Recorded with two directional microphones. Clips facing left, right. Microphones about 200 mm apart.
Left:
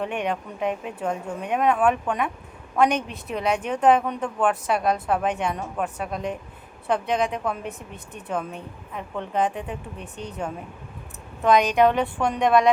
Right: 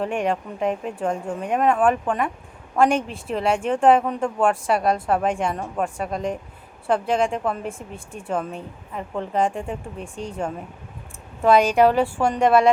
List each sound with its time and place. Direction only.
0.0 s a woman's voice: centre (ahead or behind)
7.7 s speech: 25° right (ahead or behind)
8.3 s speech: centre (ahead or behind)
11.4 s speech: 5° right (ahead or behind)